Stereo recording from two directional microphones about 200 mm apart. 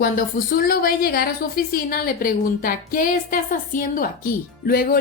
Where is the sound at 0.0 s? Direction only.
45° left (ahead or behind).